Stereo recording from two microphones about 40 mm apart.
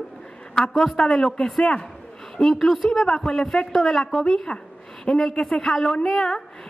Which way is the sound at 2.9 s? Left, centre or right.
Centre.